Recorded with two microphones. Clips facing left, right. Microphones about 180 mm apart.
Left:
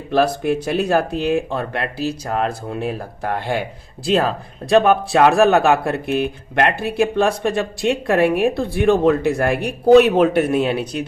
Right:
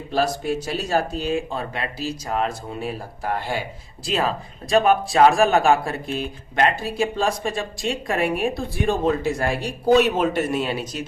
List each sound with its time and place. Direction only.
0.1 s speech: 55° left (ahead or behind)